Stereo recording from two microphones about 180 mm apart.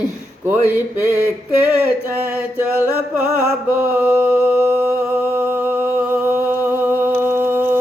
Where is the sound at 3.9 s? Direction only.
10° right (ahead or behind).